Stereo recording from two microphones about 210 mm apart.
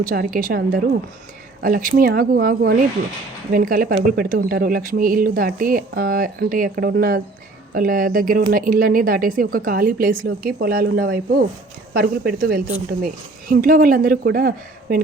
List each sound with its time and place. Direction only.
0.0 s speech: 40° right (ahead or behind)